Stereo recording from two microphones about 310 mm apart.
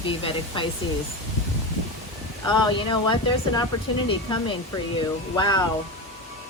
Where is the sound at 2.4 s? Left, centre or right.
Centre.